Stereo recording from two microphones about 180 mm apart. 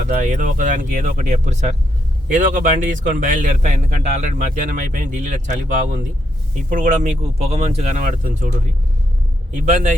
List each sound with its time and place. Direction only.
0.1 s a man's voice: 45° right (ahead or behind)
9.6 s speech: 40° right (ahead or behind)